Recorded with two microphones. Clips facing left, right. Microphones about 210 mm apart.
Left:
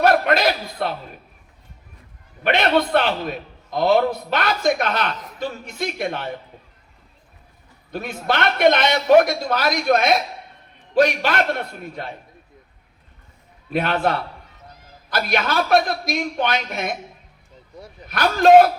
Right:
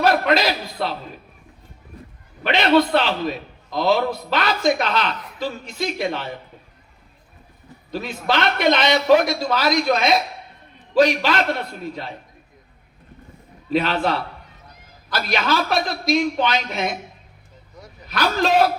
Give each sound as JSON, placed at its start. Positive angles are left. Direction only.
{"t": 0.0, "sound": "a sound", "side_deg": 55}
{"t": 2.4, "sound": "a man's voice", "side_deg": 55}
{"t": 7.9, "sound": "a man's voice", "side_deg": 55}
{"t": 13.7, "sound": "a man's voice", "side_deg": 55}
{"t": 18.1, "sound": "a man's voice", "side_deg": 55}